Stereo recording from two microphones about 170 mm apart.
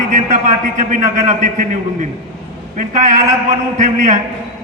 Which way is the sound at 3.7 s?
45° right (ahead or behind).